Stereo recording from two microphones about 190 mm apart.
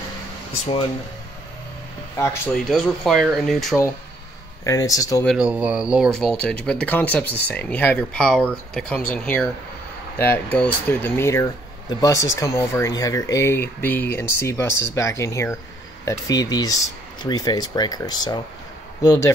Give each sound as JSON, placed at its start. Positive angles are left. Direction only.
{"t": 2.1, "sound": "speech", "side_deg": 10}
{"t": 2.7, "sound": "speech", "side_deg": 0}
{"t": 4.6, "sound": "speech", "side_deg": 15}
{"t": 5.2, "sound": "speech", "side_deg": -5}